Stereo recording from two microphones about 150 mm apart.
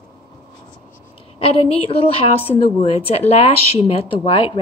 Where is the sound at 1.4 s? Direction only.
40° left (ahead or behind).